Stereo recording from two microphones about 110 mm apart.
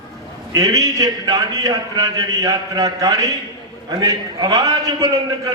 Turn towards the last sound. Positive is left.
turn(degrees=-35)  # may be behind; listen again after turning